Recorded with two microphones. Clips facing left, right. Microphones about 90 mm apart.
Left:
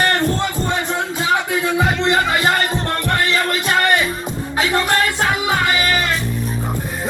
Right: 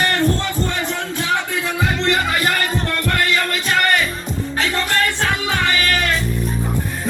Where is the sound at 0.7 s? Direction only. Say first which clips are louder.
Left 3 dB; 15° left (ahead or behind).